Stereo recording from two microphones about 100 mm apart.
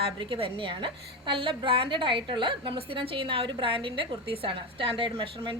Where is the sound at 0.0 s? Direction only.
60° right (ahead or behind).